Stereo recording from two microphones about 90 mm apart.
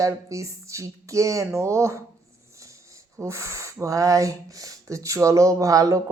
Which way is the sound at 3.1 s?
35° right (ahead or behind).